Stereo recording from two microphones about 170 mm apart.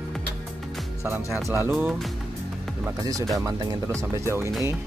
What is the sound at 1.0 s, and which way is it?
Speech, 15° right (ahead or behind).